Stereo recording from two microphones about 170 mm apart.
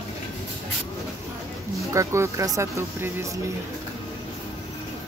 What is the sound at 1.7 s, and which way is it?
Speech, 15° right (ahead or behind).